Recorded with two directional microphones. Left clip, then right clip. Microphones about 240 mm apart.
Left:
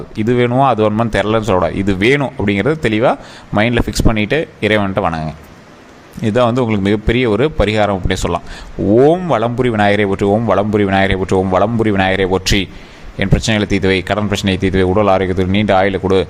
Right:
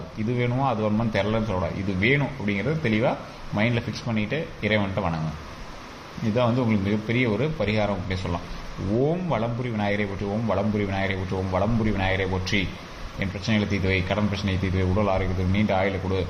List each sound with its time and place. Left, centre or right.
0.3 s speech: left
6.3 s speech: left